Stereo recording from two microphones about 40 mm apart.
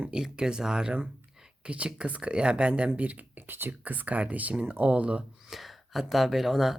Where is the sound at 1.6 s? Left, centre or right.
Right.